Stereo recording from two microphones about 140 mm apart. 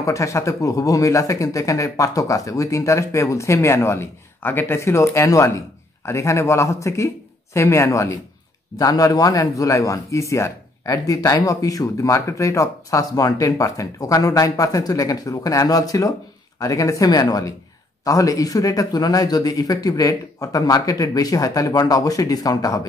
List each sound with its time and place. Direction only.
0.0 s a man's voice: 20° left (ahead or behind)